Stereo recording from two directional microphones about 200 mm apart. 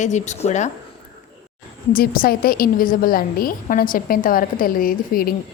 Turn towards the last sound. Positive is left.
turn(degrees=45)  # may be behind; listen again after turning